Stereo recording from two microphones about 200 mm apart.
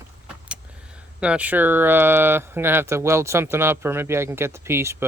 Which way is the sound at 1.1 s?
5° right (ahead or behind).